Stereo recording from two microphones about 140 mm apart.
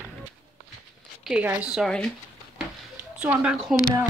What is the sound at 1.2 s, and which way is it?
Speech, 10° right (ahead or behind).